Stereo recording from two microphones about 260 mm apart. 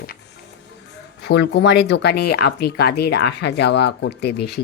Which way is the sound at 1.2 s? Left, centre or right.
Left.